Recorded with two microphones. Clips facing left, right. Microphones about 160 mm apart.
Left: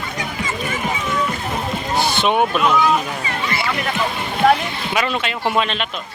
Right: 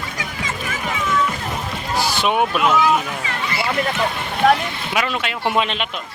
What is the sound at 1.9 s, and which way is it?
Rowboat, 25° left (ahead or behind).